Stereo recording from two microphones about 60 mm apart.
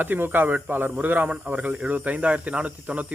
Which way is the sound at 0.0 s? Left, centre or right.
Right.